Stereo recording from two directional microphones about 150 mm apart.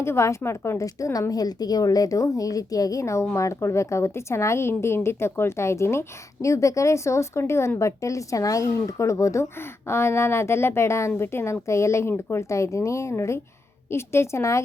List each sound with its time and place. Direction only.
0.0 s a woman's voice: 20° left (ahead or behind)